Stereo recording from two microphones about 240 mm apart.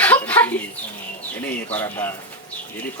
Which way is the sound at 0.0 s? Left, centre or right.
Centre.